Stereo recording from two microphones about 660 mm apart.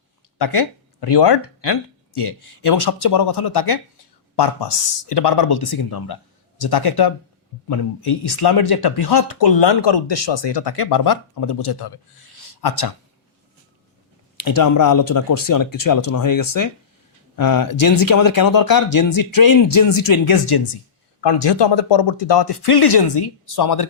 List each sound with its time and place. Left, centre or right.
0.3 s speech: left
12.5 s a sound: left
14.4 s speech: left